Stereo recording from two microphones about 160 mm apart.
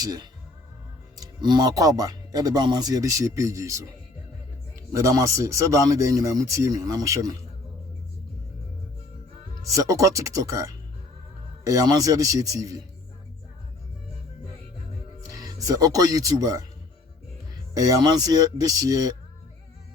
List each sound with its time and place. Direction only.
0.0 s speech: 25° right (ahead or behind)
4.9 s speech: 20° right (ahead or behind)
9.7 s speech: 20° right (ahead or behind)
15.3 s speech: 20° right (ahead or behind)
17.7 s speech: 20° right (ahead or behind)